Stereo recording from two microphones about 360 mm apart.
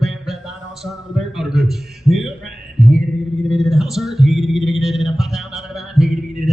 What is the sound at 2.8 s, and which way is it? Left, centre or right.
Music, centre.